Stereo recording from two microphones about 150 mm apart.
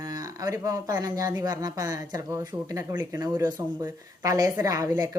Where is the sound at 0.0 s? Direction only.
25° right (ahead or behind).